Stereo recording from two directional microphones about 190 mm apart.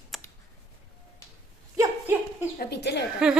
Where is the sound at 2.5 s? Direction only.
60° left (ahead or behind).